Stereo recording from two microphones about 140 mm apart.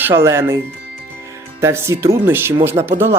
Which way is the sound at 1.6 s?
20° right (ahead or behind).